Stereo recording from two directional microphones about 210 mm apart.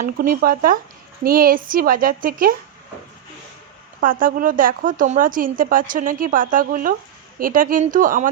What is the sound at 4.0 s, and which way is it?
A woman's voice, 40° right (ahead or behind).